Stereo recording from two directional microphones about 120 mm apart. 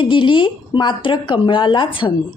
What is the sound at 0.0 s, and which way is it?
A woman's voice, 45° left (ahead or behind).